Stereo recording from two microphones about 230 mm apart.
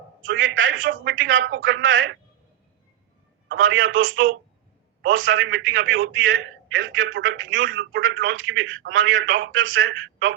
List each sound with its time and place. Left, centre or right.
0.3 s a man's voice: right
3.5 s a man's voice: right